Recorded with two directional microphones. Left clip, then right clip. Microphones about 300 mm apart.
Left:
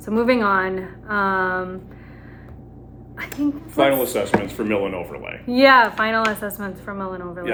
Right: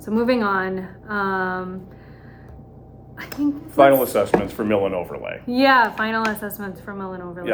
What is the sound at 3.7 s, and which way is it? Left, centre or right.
Speech, centre.